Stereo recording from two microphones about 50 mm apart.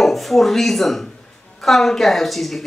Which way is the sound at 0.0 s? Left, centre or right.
Centre.